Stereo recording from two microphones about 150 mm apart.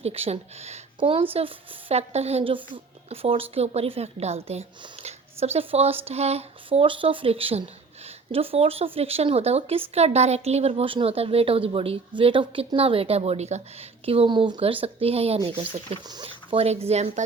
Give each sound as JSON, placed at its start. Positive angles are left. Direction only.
{"t": 0.0, "sound": "a woman's voice", "side_deg": -45}